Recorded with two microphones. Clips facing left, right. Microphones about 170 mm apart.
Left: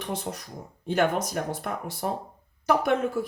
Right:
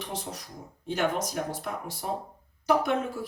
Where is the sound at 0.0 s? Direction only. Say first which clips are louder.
Left 4 dB; 55° left (ahead or behind).